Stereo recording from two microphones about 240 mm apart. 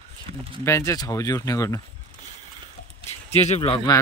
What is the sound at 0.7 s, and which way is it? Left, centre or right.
A man's voice, centre.